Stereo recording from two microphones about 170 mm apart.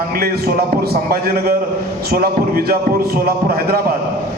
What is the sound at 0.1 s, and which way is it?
A man's voice, 65° right (ahead or behind).